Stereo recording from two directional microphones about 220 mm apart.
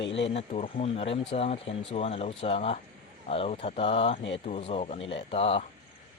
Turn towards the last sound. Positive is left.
turn(degrees=25)  # may be behind; listen again after turning